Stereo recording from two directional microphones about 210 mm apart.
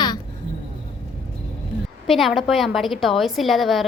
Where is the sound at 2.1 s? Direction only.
Centre (ahead or behind).